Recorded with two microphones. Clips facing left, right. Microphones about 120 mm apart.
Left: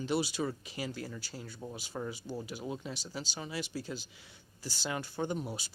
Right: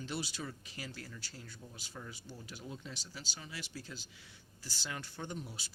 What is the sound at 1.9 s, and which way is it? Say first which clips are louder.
Speech: left 10 dB; 40° left (ahead or behind).